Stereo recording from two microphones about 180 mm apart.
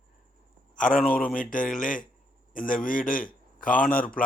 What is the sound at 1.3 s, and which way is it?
A man's voice, 50° left (ahead or behind).